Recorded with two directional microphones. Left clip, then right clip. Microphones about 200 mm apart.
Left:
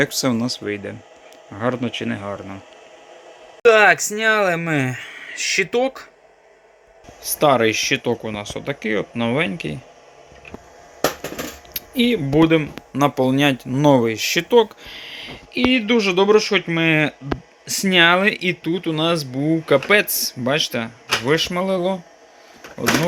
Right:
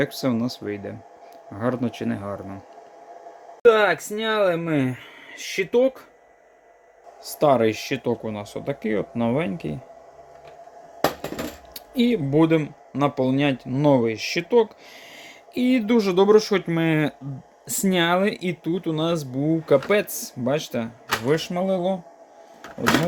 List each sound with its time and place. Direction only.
0.0 s speech: centre (ahead or behind)
3.8 s speech: 15° right (ahead or behind)
7.3 s speech: 5° right (ahead or behind)
11.7 s speech: 5° right (ahead or behind)
15.1 s speech: 15° right (ahead or behind)